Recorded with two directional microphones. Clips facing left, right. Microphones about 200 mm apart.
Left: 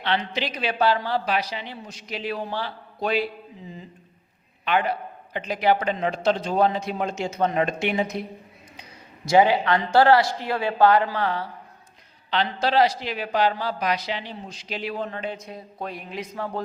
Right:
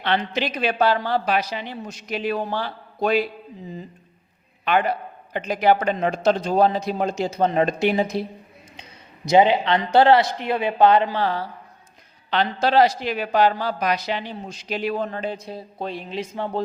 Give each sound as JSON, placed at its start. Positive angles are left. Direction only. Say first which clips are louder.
{"t": 0.0, "sound": "a man's voice", "louder": "right 3 dB", "side_deg": -50}
{"t": 4.6, "sound": "a man's voice", "louder": "right 2 dB", "side_deg": -45}
{"t": 12.3, "sound": "a man's voice", "louder": "right 3 dB", "side_deg": -50}